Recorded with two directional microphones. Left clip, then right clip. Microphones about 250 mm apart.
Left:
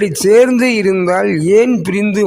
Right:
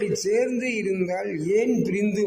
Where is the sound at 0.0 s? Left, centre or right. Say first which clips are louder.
Left 14 dB; left.